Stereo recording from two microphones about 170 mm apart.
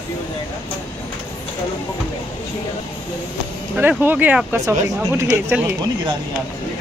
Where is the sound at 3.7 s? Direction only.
10° right (ahead or behind).